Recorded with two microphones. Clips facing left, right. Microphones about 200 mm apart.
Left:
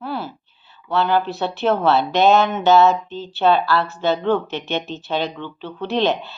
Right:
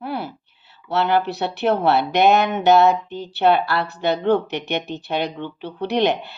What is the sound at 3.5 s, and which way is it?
Speech, 60° right (ahead or behind).